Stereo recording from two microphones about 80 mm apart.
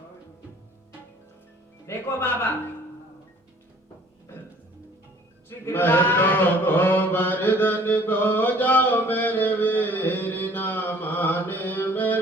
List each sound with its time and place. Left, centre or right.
1.9 s speech: left
5.5 s mantra: left